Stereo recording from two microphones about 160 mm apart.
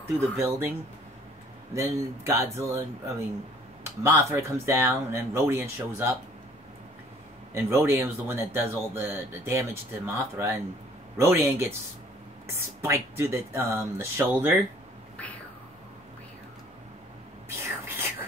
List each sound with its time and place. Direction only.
0.4 s speech: 15° right (ahead or behind)
4.0 s speech: 15° right (ahead or behind)
7.5 s speech: 15° right (ahead or behind)
17.8 s whispering: 15° right (ahead or behind)